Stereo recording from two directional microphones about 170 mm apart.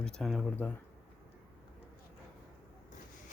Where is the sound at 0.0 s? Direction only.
5° left (ahead or behind).